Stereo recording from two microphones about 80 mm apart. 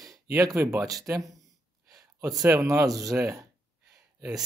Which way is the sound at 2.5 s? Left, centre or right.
Right.